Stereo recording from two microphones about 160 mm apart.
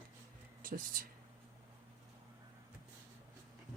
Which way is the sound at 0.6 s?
60° right (ahead or behind).